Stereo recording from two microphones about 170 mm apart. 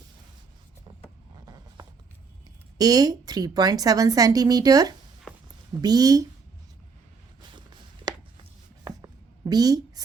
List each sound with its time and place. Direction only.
1.5 s a sound: 20° right (ahead or behind)
2.7 s a woman's voice: 20° right (ahead or behind)
7.5 s chopping: 25° right (ahead or behind)
8.8 s writing: 20° right (ahead or behind)